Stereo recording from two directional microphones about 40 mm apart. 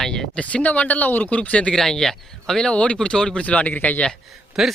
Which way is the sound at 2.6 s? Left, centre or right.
Left.